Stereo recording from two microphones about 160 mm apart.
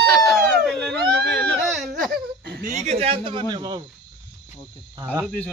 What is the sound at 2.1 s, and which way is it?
Laughter, 90° right.